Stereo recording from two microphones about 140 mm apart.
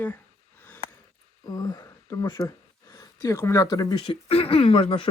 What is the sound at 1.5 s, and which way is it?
Speech, 25° left (ahead or behind).